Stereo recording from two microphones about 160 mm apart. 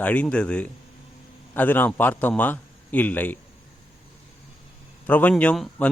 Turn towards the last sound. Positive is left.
turn(degrees=5)  # may be behind; listen again after turning